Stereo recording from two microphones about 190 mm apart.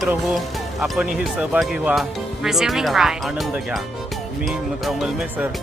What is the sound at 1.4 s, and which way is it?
Speech, 5° right (ahead or behind).